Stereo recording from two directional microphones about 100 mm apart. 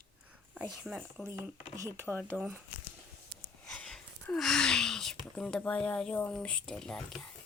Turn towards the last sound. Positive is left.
turn(degrees=5)  # may be behind; listen again after turning